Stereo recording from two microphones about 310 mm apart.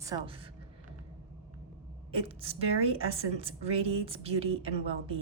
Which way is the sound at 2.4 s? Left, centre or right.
Centre.